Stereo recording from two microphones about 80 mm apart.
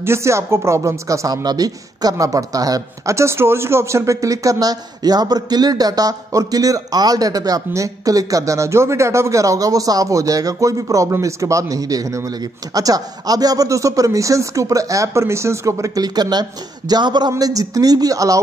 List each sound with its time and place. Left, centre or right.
0.0 s speech: right
3.2 s speech: right
17.4 s speech: right